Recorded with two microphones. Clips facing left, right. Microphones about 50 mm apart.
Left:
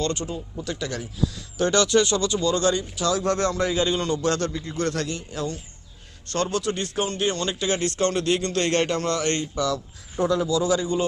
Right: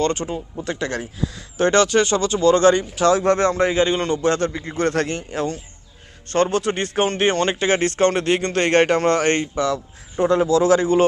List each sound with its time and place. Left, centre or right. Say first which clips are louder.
0.0 s speech: right 5 dB; right